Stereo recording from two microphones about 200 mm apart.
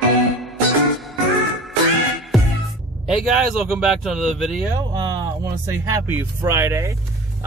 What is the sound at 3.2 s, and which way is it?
Speech, 5° right (ahead or behind).